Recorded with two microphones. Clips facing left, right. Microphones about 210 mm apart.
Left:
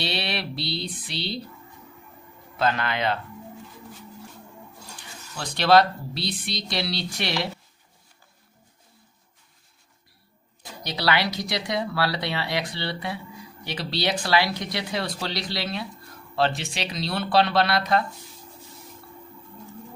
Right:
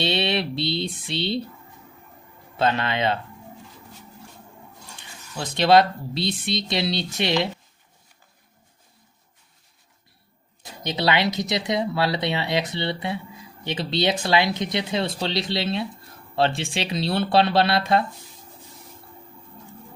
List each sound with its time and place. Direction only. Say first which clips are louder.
0.0 s a sound: right 6 dB; 25° right (ahead or behind)
2.6 s speech: right 2 dB; 25° right (ahead or behind)
5.4 s speech: right 2 dB; 20° right (ahead or behind)
10.6 s speech: right 4 dB; 20° right (ahead or behind)